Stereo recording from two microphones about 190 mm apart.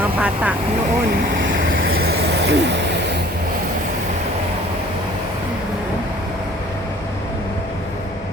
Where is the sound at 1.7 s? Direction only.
90° right; by 3.2 s 65° right (ahead or behind).